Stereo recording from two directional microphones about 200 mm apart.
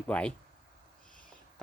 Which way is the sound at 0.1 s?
5° left (ahead or behind).